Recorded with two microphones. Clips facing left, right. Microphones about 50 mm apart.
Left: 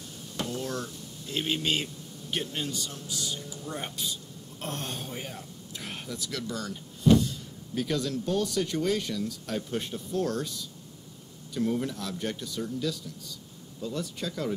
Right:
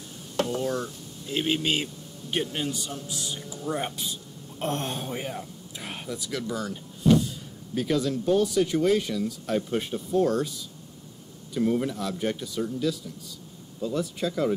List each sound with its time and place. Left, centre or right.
0.6 s speech: centre
11.5 s speech: centre